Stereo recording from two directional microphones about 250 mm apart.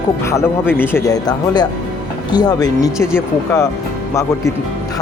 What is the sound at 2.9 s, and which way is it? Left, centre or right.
Speech, centre.